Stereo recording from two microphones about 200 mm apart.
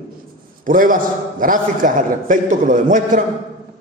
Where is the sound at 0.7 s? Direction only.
45° right (ahead or behind).